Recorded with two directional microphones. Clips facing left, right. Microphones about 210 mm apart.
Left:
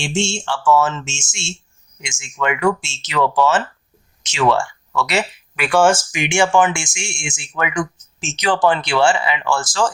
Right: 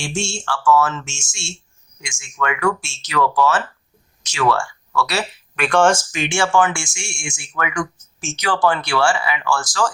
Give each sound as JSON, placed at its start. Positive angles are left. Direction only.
{"t": 0.0, "sound": "speech", "side_deg": 25}
{"t": 5.5, "sound": "speech", "side_deg": 5}